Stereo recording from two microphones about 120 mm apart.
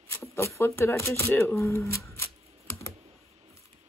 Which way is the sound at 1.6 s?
25° left (ahead or behind).